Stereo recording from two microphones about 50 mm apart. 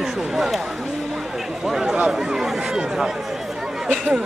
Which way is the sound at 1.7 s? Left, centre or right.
Centre.